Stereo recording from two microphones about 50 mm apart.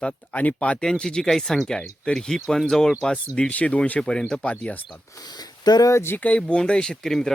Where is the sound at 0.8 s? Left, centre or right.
Centre.